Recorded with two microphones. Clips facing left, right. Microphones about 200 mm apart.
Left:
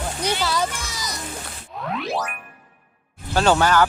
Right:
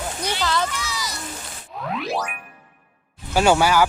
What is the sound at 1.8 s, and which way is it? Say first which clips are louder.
Speech: even; centre (ahead or behind).